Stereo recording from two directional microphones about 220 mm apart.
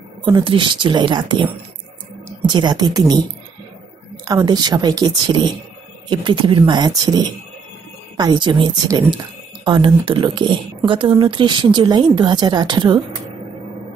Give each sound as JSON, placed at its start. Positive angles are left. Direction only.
{"t": 0.2, "sound": "speech", "side_deg": -20}